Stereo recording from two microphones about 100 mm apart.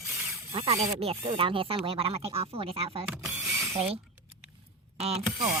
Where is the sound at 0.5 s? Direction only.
85° right.